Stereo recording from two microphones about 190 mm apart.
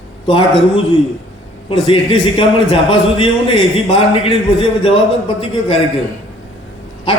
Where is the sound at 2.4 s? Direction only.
25° left (ahead or behind).